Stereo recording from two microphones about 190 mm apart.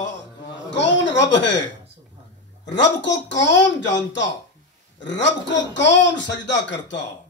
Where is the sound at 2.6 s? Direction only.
70° left (ahead or behind).